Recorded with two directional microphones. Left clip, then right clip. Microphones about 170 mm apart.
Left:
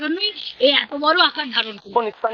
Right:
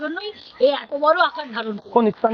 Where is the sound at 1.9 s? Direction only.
15° left (ahead or behind).